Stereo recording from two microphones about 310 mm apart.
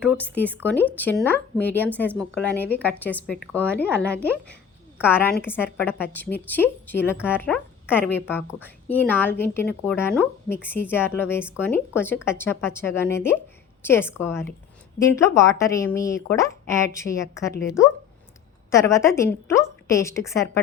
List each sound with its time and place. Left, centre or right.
0.2 s a woman's voice: centre
17.5 s speech: left
18.7 s a woman's voice: centre